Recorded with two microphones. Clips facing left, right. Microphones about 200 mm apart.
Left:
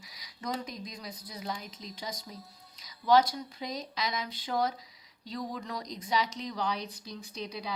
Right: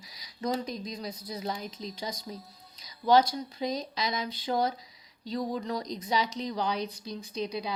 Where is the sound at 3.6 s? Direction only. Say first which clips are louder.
Right 4 dB; 30° right (ahead or behind).